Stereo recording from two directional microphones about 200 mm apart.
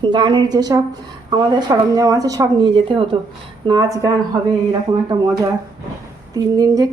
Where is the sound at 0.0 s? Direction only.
20° right (ahead or behind).